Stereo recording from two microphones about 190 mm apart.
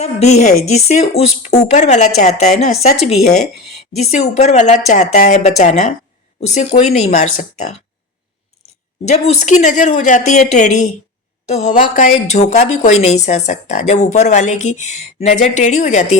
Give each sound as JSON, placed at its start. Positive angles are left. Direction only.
{"t": 0.0, "sound": "speech", "side_deg": 35}
{"t": 9.1, "sound": "speech", "side_deg": 35}